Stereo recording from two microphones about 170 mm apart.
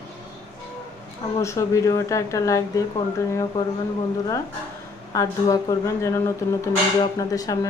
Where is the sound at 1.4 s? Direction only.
15° left (ahead or behind).